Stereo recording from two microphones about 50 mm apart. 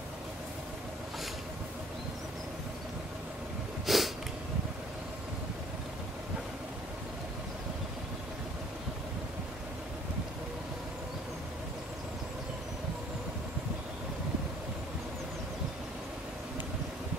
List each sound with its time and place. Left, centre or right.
3.8 s sniff: centre